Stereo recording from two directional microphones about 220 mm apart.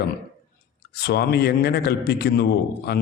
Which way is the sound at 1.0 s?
45° left (ahead or behind).